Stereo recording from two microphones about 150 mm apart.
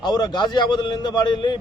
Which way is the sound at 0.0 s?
30° left (ahead or behind).